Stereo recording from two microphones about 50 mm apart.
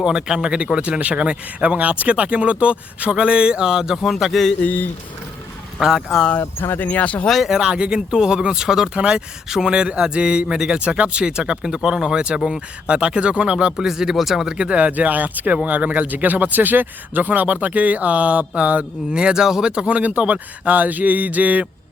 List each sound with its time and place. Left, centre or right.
0.0 s speech: centre
0.7 s speech: right
4.0 s a man's voice: centre
4.6 s speech: left
5.8 s speech: centre
6.4 s speech: left
6.8 s speech: left
7.3 s a man's voice: centre
7.5 s speech: centre
13.7 s speech: centre
14.5 s speech: right
19.7 s speech: right